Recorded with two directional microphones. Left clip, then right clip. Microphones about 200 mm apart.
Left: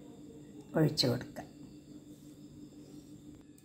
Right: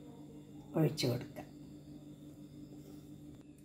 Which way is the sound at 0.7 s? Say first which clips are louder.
Left 4 dB; 30° left (ahead or behind).